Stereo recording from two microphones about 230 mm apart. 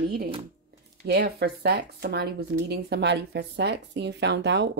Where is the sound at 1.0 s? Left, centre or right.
Right.